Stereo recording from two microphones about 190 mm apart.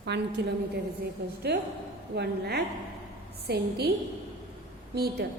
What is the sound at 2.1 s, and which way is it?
A woman's voice, 60° right (ahead or behind).